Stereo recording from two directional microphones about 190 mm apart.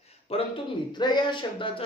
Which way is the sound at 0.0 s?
30° left (ahead or behind).